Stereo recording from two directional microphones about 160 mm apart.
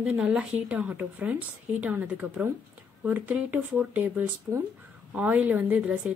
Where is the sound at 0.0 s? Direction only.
5° right (ahead or behind).